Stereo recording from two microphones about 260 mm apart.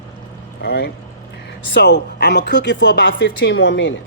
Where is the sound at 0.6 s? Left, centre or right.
Left.